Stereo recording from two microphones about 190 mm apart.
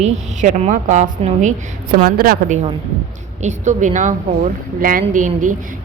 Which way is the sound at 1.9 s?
50° right (ahead or behind).